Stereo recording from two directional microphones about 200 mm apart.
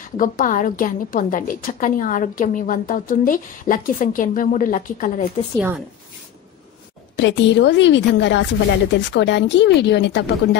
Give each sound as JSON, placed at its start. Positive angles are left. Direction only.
{"t": 0.0, "sound": "a woman's voice", "side_deg": 40}
{"t": 7.2, "sound": "speech", "side_deg": 65}